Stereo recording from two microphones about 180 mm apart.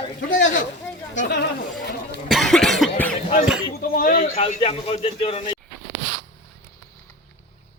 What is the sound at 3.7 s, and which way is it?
Speech, 55° left (ahead or behind).